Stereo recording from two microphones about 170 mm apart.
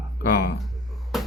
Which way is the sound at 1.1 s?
Centre (ahead or behind).